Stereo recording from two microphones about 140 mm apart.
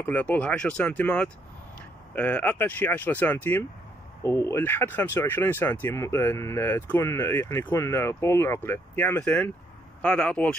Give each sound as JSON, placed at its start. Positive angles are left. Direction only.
{"t": 0.0, "sound": "speech", "side_deg": 10}